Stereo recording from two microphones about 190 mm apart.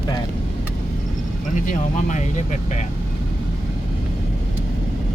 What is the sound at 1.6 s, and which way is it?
Speech, 40° left (ahead or behind).